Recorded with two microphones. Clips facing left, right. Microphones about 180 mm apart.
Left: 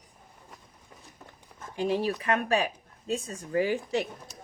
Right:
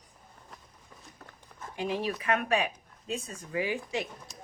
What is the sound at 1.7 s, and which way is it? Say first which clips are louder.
Speech: left 4 dB; 35° left (ahead or behind).